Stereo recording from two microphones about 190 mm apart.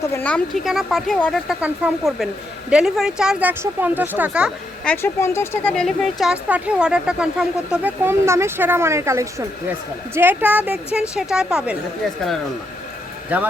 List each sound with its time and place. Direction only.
0.1 s speech: 10° left (ahead or behind); by 4.5 s 5° right (ahead or behind)
4.9 s speech: 15° left (ahead or behind)
5.7 s speech: centre (ahead or behind)
13.3 s speech: 10° right (ahead or behind)